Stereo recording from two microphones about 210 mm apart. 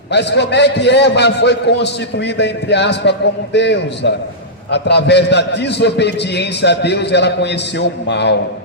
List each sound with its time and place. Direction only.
0.1 s a man's voice: 55° left (ahead or behind)